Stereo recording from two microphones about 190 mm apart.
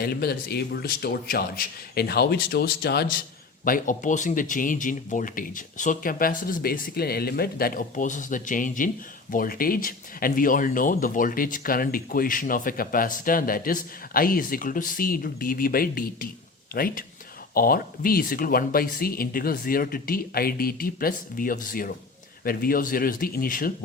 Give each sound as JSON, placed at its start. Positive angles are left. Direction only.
{"t": 0.0, "sound": "speech", "side_deg": 55}
{"t": 3.6, "sound": "speech", "side_deg": 45}